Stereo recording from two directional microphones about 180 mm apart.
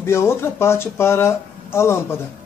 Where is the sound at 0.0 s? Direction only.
15° left (ahead or behind).